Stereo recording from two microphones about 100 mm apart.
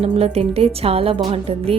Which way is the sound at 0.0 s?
85° right.